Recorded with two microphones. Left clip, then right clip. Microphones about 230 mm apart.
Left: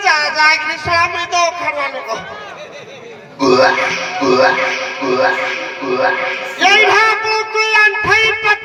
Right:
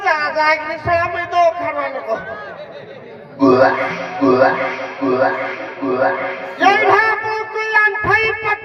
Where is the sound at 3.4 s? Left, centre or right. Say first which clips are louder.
Left 1 dB; right.